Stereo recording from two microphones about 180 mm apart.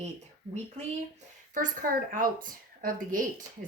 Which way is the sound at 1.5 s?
50° right (ahead or behind).